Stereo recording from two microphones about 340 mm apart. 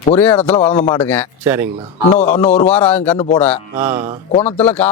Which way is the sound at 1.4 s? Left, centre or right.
Centre.